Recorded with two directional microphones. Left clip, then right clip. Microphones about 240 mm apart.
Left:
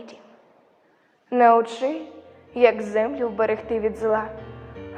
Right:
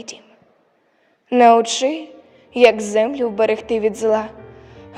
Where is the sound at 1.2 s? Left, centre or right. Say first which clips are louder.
Right 5 dB; right.